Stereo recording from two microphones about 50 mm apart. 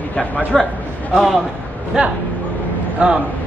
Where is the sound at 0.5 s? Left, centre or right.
Centre.